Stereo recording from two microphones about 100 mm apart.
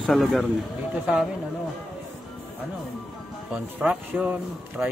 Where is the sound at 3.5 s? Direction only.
10° right (ahead or behind).